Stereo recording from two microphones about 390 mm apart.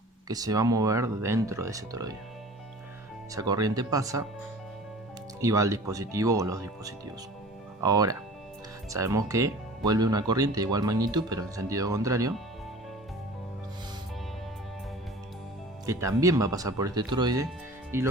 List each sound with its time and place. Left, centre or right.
0.3 s speech: centre
3.3 s speech: centre
5.4 s speech: centre
15.9 s speech: centre